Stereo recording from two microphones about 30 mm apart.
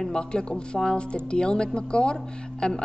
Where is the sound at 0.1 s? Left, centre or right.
Left.